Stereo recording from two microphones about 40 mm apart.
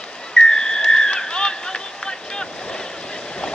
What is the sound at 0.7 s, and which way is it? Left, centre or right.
Boat, centre.